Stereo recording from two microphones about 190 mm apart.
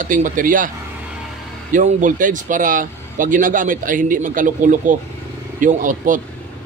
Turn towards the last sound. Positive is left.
turn(degrees=-45)  # may be behind; listen again after turning